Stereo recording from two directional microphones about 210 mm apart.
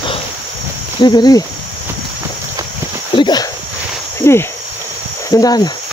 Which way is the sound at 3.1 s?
20° left (ahead or behind).